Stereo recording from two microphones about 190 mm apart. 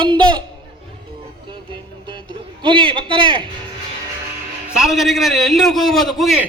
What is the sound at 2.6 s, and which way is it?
Speech, 25° right (ahead or behind).